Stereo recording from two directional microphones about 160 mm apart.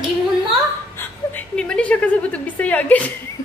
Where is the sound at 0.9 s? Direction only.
10° left (ahead or behind).